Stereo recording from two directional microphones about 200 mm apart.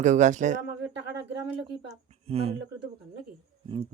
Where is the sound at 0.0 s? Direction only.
40° right (ahead or behind).